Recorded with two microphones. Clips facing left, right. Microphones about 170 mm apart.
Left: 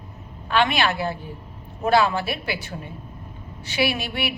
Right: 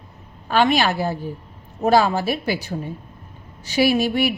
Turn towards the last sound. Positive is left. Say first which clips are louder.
# right 8 dB
turn(degrees=-40)  # may be behind; listen again after turning